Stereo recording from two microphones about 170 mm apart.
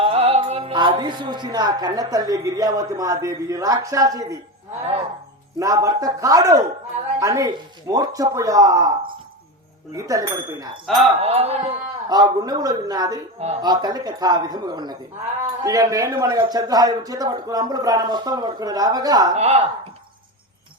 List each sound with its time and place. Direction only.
0.0 s speech: 35° right (ahead or behind)
5.5 s speech: 20° right (ahead or behind)
10.8 s speech: centre (ahead or behind)
11.2 s music: 35° right (ahead or behind)
12.0 s speech: 25° right (ahead or behind)
19.3 s music: 40° right (ahead or behind)